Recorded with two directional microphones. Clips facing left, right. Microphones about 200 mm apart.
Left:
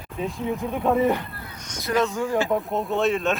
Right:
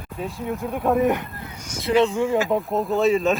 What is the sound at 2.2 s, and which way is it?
Speech, centre (ahead or behind).